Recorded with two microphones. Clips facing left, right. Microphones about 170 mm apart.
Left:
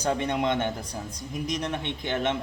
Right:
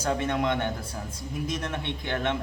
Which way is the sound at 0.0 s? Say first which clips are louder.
Left 1 dB; 20° left (ahead or behind).